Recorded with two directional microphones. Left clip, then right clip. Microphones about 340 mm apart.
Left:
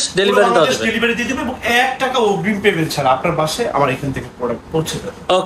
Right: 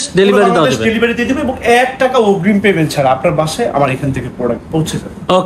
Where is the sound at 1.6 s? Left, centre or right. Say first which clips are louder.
Right 5 dB; centre.